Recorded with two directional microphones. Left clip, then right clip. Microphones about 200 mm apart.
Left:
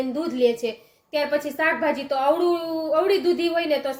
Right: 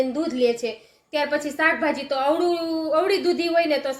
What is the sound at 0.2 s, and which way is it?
Speech, centre (ahead or behind).